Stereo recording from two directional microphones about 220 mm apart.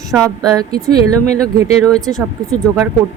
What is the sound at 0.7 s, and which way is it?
Speech, 40° right (ahead or behind).